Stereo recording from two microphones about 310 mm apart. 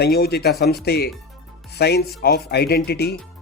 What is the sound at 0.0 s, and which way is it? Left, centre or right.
Speech, left.